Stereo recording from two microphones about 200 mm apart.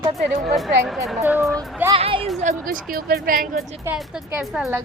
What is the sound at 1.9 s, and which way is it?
Speech, 25° right (ahead or behind).